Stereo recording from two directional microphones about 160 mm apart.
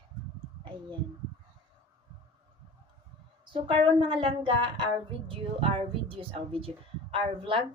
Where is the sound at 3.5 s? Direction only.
30° right (ahead or behind).